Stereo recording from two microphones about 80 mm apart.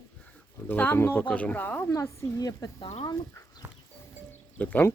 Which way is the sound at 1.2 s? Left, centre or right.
Centre.